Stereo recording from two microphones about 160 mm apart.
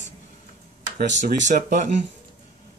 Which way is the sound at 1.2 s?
50° right (ahead or behind).